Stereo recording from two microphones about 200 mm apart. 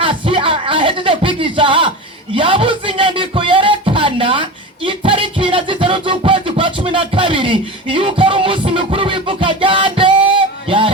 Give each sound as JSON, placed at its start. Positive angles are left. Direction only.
{"t": 0.0, "sound": "music", "side_deg": -25}
{"t": 2.3, "sound": "speech", "side_deg": -25}